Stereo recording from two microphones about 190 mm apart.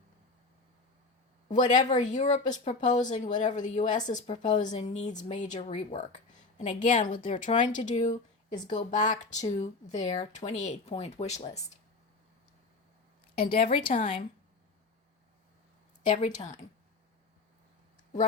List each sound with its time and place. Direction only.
1.5 s speech: 40° left (ahead or behind)
13.5 s speech: 30° left (ahead or behind)
16.0 s speech: 40° left (ahead or behind)